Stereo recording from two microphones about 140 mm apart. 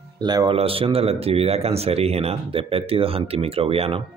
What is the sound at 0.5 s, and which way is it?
Speech, 40° right (ahead or behind).